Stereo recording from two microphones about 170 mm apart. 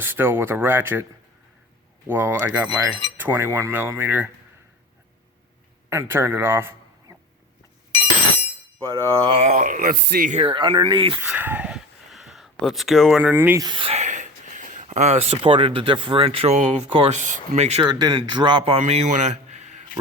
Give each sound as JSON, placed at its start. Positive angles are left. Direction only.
{"t": 0.0, "sound": "speech", "side_deg": -15}
{"t": 2.0, "sound": "speech", "side_deg": -10}
{"t": 5.9, "sound": "a man's voice", "side_deg": -15}
{"t": 9.2, "sound": "speech", "side_deg": -35}
{"t": 10.3, "sound": "a man's voice", "side_deg": -30}
{"t": 11.2, "sound": "a sound", "side_deg": -10}
{"t": 13.7, "sound": "speech", "side_deg": -30}
{"t": 17.8, "sound": "a man's voice", "side_deg": -25}